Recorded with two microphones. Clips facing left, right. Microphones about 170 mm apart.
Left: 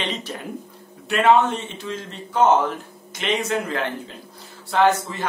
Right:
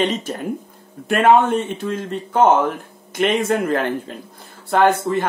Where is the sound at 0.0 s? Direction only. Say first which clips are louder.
Right 8 dB; 45° right (ahead or behind).